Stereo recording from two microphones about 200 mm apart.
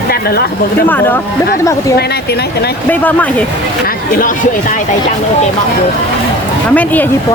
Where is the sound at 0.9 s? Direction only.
10° left (ahead or behind).